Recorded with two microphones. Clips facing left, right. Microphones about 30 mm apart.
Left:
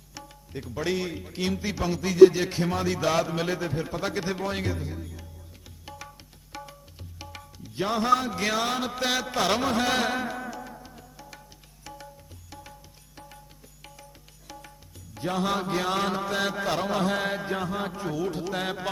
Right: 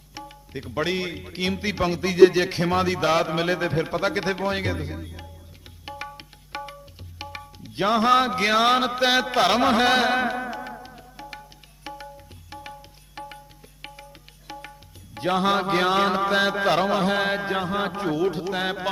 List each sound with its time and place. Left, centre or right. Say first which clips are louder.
0.1 s music: right 4 dB; right
0.9 s a man's voice: right 2 dB; right
3.7 s a man's voice: right 6 dB; right
3.9 s a man's voice: right 5 dB; right
5.8 s tabla: right 8 dB; right
7.2 s music: right 6 dB; right
8.3 s a man's voice: right 6 dB; right
8.6 s a man's voice: right 9 dB; right
8.9 s a man's voice: right 7 dB; right
10.8 s music: right 5 dB; right
14.5 s music: right 6 dB; right
15.6 s a man's voice: right 6 dB; right
15.9 s a man's voice: right 6 dB; right
16.9 s music: right 4 dB; right